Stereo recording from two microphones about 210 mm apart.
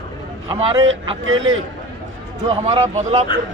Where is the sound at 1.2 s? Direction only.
70° right (ahead or behind).